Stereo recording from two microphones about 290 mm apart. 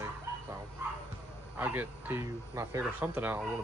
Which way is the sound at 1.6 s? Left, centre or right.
Centre.